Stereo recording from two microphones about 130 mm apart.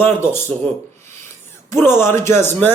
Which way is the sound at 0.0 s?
20° left (ahead or behind).